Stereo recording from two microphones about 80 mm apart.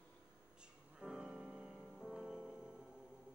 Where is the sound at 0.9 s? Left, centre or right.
Centre.